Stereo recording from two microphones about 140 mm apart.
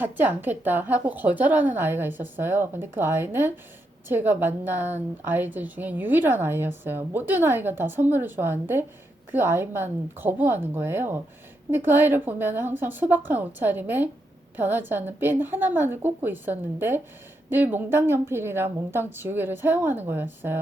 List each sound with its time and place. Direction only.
0.0 s a woman's voice: 15° right (ahead or behind)